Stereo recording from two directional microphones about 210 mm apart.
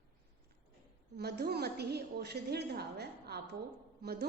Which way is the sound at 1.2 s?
50° right (ahead or behind).